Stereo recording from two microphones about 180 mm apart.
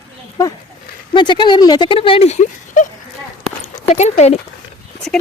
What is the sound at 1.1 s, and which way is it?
Speech, 25° left (ahead or behind).